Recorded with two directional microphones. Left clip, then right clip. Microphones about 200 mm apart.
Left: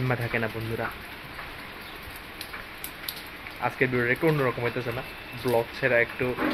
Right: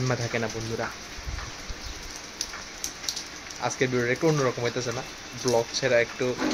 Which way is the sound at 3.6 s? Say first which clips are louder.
Left 1 dB; 15° right (ahead or behind).